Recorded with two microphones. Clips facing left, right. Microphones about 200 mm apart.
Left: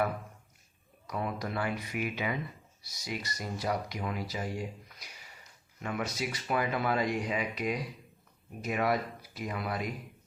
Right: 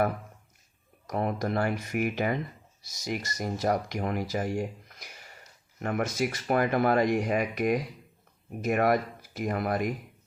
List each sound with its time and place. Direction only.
1.0 s speech: 50° right (ahead or behind)